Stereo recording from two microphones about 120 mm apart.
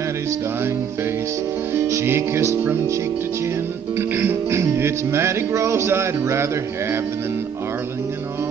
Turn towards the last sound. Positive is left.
turn(degrees=-20)  # may be behind; listen again after turning